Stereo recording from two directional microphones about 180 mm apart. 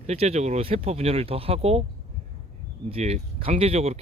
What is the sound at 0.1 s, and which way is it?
Speech, 35° right (ahead or behind).